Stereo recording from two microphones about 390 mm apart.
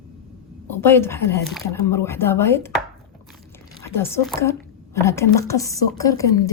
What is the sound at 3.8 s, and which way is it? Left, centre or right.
A woman's voice, centre.